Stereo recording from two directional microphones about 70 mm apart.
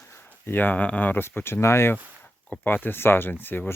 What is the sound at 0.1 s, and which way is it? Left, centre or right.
Speech, left.